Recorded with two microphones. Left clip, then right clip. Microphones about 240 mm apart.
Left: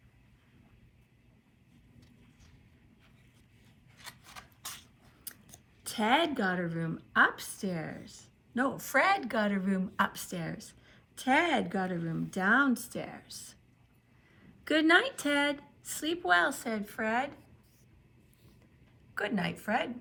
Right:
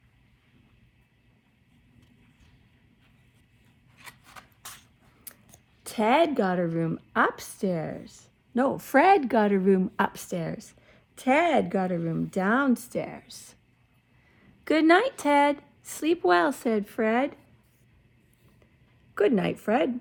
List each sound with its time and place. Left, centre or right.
4.6 s a sound: centre
5.8 s a woman's voice: right
14.6 s a woman's voice: right
19.2 s a woman's voice: right